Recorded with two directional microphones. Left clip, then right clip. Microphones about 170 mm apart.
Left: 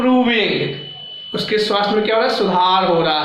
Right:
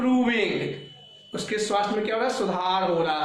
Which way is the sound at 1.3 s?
Centre (ahead or behind).